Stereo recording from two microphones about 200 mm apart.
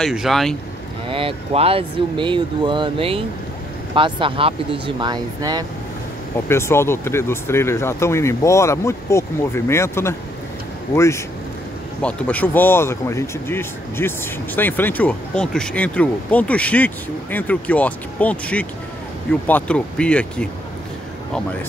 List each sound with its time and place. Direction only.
0.0 s speech: centre (ahead or behind)
1.0 s speech: 25° right (ahead or behind)
6.5 s speech: 10° left (ahead or behind)